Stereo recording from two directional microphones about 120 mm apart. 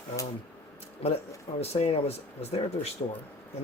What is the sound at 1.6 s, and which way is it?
Speech, 60° left (ahead or behind).